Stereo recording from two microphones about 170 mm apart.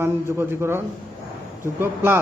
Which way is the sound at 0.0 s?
15° right (ahead or behind).